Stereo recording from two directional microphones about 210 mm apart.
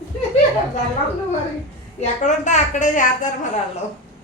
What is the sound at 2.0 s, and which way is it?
A woman's voice, 35° left (ahead or behind).